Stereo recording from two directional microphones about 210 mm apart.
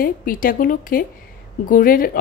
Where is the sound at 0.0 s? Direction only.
40° left (ahead or behind).